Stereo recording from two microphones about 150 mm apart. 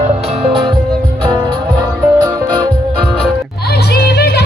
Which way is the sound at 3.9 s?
90° left.